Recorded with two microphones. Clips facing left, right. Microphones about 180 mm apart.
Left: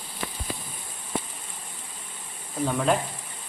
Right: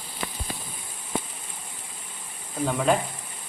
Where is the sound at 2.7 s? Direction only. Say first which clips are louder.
Right 1 dB; centre (ahead or behind).